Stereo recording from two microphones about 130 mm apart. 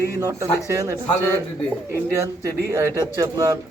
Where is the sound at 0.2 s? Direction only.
20° right (ahead or behind).